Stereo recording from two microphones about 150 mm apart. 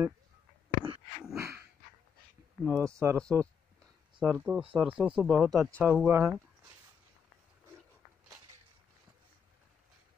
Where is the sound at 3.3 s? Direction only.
20° right (ahead or behind).